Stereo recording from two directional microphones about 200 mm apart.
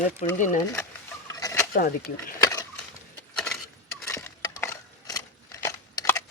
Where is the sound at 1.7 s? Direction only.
45° left (ahead or behind).